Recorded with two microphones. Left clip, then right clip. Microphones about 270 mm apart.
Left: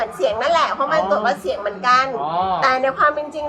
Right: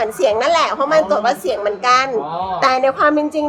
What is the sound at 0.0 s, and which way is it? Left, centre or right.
A woman's voice, right.